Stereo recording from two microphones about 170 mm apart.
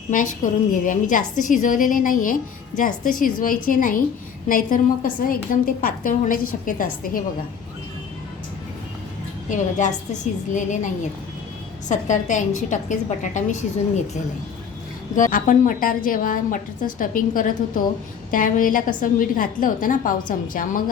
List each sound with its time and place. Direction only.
0.1 s a woman's voice: 50° left (ahead or behind)
9.5 s a woman's voice: 45° left (ahead or behind)
11.9 s a woman's voice: 45° left (ahead or behind)
15.1 s a woman's voice: 50° left (ahead or behind)